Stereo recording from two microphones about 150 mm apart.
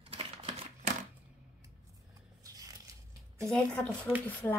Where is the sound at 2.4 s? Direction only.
25° right (ahead or behind).